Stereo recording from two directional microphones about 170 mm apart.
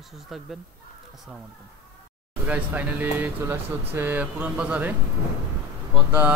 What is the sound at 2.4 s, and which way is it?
Speech, 10° right (ahead or behind).